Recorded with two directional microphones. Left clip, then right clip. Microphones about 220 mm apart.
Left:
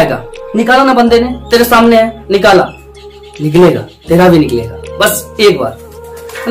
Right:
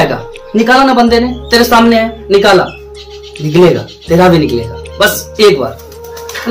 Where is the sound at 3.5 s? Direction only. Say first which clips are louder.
Even; 15° left (ahead or behind).